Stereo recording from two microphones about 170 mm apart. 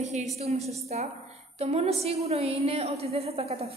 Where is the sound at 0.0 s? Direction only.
40° right (ahead or behind).